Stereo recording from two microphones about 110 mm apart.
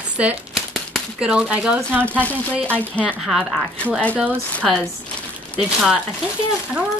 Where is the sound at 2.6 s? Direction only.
15° left (ahead or behind).